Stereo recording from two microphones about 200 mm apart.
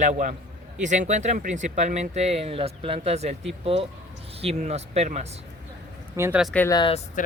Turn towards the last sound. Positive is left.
turn(degrees=20)  # may be behind; listen again after turning